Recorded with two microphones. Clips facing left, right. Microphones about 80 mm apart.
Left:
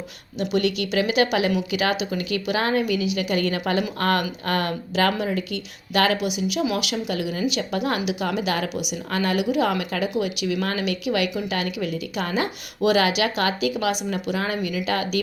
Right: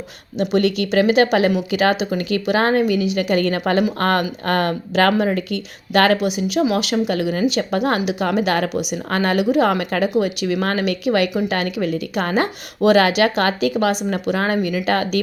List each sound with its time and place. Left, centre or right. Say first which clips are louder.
0.3 s a woman's voice: right 5 dB; right
6.9 s a woman's voice: right 7 dB; right